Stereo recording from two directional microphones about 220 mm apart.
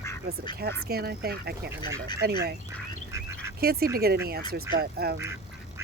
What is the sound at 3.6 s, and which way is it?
Speech, 45° right (ahead or behind).